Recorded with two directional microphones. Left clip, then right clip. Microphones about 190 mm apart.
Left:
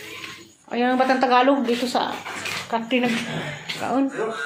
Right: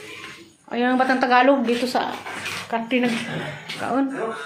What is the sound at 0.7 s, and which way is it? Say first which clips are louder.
A woman's voice: even; 5° right (ahead or behind).